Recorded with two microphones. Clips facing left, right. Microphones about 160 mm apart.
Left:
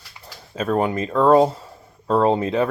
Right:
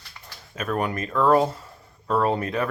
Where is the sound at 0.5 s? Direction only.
25° left (ahead or behind).